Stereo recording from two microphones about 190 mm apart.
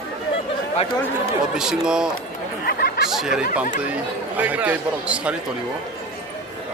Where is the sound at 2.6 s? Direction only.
55° left (ahead or behind).